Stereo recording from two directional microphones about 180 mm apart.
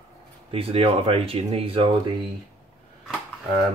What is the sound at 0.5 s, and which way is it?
Speech, 30° right (ahead or behind).